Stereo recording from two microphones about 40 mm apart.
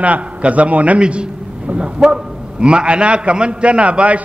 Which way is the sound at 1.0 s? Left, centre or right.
Right.